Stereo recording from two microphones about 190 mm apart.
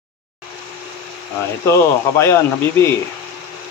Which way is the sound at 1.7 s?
15° left (ahead or behind).